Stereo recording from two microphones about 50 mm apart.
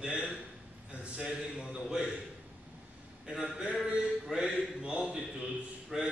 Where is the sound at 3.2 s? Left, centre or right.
Centre.